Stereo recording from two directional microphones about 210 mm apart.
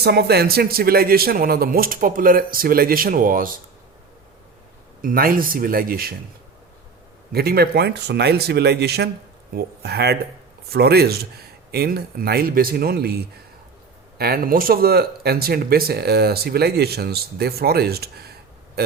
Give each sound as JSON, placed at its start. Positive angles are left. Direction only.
{"t": 0.0, "sound": "speech", "side_deg": -50}
{"t": 5.0, "sound": "speech", "side_deg": -45}
{"t": 7.3, "sound": "speech", "side_deg": -45}